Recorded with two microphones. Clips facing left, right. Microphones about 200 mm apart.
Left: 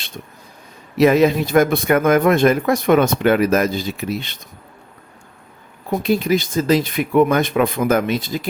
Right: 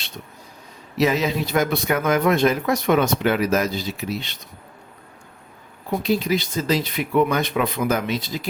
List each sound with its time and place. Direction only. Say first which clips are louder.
0.9 s speech: left 7 dB; 55° left (ahead or behind)
5.9 s speech: left 4 dB; 50° left (ahead or behind)